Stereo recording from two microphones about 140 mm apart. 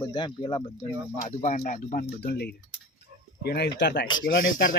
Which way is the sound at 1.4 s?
65° left (ahead or behind).